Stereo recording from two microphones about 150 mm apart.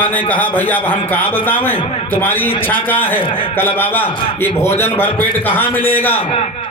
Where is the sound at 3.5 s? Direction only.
15° left (ahead or behind).